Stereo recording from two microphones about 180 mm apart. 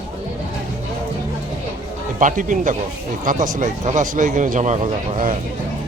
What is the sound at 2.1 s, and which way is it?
A man's voice, 45° right (ahead or behind).